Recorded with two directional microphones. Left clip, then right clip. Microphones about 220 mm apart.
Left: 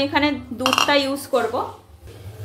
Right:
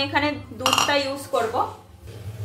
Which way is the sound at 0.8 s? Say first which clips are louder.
Left 3 dB; 30° left (ahead or behind).